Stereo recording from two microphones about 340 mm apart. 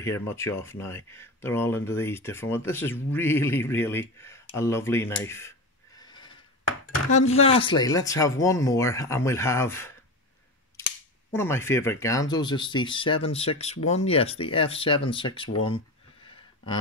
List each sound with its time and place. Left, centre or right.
0.0 s speech: centre
5.9 s a sound: centre
7.1 s speech: centre
11.3 s speech: centre